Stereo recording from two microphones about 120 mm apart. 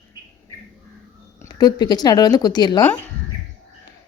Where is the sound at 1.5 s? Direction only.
35° left (ahead or behind).